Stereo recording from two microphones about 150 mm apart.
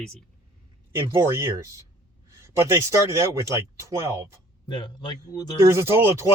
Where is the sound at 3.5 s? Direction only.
20° right (ahead or behind).